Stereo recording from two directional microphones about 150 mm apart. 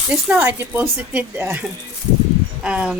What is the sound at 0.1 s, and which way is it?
Speech, 10° right (ahead or behind).